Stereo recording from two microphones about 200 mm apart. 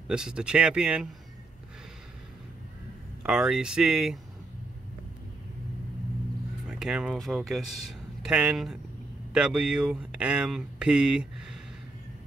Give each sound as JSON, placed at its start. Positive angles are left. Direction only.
{"t": 0.1, "sound": "speech", "side_deg": -5}
{"t": 3.3, "sound": "speech", "side_deg": -5}
{"t": 6.7, "sound": "speech", "side_deg": -5}